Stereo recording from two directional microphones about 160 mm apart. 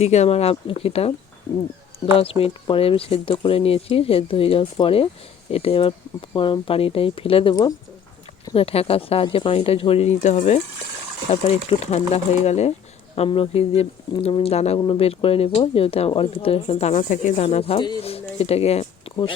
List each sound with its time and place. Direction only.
0.0 s speech: 45° left (ahead or behind)
2.1 s speech: 35° left (ahead or behind)
8.5 s speech: 40° left (ahead or behind)